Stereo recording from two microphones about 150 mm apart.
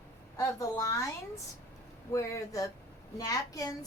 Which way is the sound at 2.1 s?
20° left (ahead or behind).